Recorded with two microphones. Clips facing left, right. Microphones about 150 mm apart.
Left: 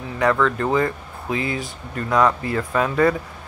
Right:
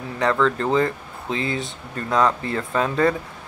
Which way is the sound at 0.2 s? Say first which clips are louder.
Left 1 dB; 30° right (ahead or behind).